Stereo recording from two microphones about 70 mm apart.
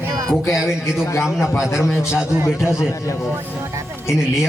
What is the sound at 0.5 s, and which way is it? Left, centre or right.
Speech, centre.